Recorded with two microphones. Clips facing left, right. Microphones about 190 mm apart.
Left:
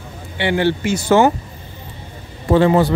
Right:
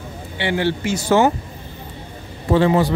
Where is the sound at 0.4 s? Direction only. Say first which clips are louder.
Left 3 dB; 60° left (ahead or behind).